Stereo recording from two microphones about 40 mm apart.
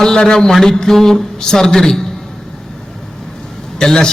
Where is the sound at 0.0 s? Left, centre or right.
Centre.